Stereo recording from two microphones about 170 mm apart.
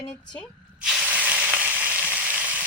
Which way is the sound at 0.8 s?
10° right (ahead or behind).